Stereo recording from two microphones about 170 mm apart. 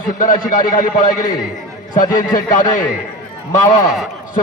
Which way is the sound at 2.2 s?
50° left (ahead or behind).